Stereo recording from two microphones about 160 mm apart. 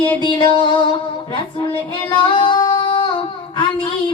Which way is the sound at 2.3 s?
30° left (ahead or behind).